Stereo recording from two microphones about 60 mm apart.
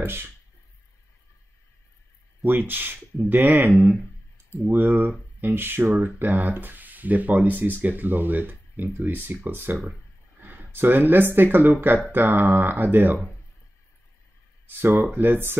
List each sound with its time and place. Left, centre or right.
0.0 s speech: right
2.4 s speech: right
10.4 s a sound: right
11.3 s speech: right
14.7 s speech: right